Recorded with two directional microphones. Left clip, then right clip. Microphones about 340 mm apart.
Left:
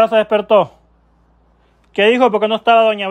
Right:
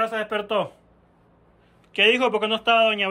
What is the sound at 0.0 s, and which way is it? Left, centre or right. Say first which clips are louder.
Speech: left 12 dB; centre.